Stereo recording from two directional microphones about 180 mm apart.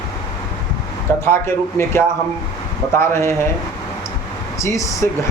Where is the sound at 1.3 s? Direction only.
15° left (ahead or behind).